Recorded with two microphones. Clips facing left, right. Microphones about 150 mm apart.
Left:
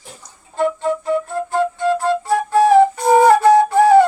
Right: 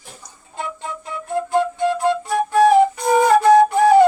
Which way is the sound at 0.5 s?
50° left (ahead or behind).